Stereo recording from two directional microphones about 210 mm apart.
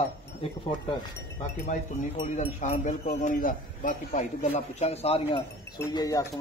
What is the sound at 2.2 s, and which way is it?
A man's voice, 35° left (ahead or behind).